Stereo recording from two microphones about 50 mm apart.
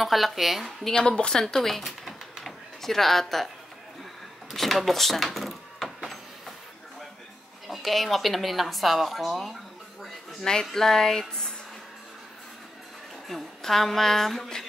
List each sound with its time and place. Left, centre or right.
0.0 s a woman's voice: centre
0.9 s speech: centre
1.4 s speech: centre
4.5 s speech: centre
5.9 s a sound: centre
7.6 s a woman's voice: centre
10.4 s a woman's voice: centre
13.3 s a woman's voice: centre